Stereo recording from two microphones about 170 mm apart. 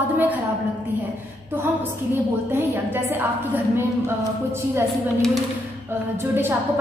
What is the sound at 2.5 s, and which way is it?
A woman's voice, 10° right (ahead or behind).